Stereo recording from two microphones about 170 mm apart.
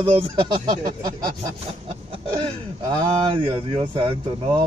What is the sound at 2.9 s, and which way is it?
Speech, 30° right (ahead or behind).